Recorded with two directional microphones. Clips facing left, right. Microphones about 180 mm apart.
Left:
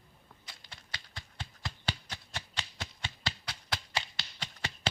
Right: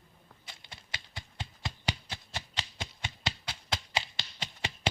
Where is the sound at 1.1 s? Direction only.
15° right (ahead or behind).